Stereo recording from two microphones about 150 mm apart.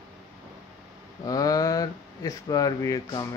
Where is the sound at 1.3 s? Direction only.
25° left (ahead or behind).